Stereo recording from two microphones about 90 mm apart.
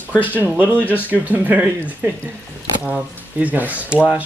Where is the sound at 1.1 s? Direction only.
20° right (ahead or behind).